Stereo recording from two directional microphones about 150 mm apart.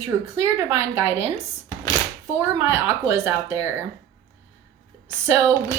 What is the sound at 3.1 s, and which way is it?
Speech, 20° right (ahead or behind).